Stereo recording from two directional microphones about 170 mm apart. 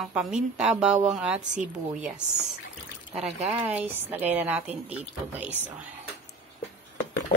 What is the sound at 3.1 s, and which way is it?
A woman's voice, 5° right (ahead or behind).